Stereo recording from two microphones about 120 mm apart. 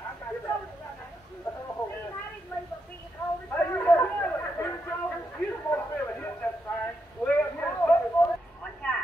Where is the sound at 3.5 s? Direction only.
15° left (ahead or behind).